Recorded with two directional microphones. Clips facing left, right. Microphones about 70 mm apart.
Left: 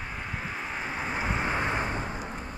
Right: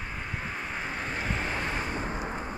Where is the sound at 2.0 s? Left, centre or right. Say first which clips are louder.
Right 2 dB; centre.